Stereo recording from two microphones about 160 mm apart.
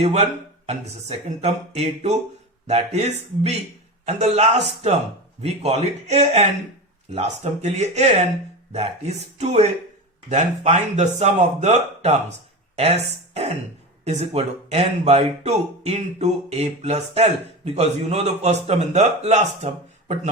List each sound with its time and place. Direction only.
0.0 s a man's voice: 40° right (ahead or behind)